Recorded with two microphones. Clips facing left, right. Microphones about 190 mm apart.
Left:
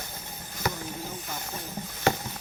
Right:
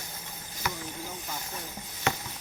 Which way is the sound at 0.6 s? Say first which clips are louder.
Left 4 dB; 35° left (ahead or behind).